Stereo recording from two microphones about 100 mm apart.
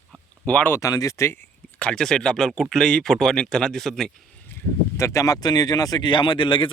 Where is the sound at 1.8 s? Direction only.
10° left (ahead or behind).